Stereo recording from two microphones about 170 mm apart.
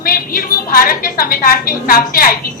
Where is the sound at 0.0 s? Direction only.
60° left (ahead or behind).